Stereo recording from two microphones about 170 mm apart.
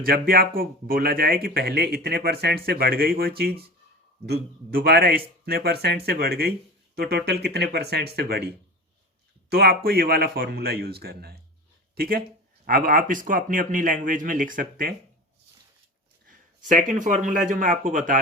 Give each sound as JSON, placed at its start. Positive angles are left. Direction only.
{"t": 0.0, "sound": "speech", "side_deg": -60}
{"t": 16.7, "sound": "speech", "side_deg": -50}